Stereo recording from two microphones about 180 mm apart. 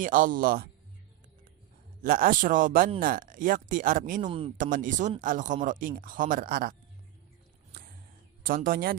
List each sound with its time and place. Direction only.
0.0 s speech: 50° right (ahead or behind)
2.0 s speech: 50° right (ahead or behind)
4.3 s speech: 30° right (ahead or behind)
4.5 s speech: 45° right (ahead or behind)
8.4 s speech: 50° right (ahead or behind)